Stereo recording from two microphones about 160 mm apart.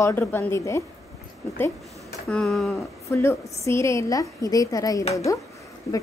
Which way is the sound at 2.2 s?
Centre (ahead or behind).